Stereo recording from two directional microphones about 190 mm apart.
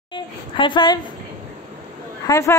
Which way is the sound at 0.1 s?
25° left (ahead or behind).